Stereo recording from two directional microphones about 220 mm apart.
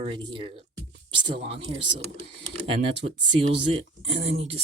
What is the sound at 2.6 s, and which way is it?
Speech, 25° right (ahead or behind).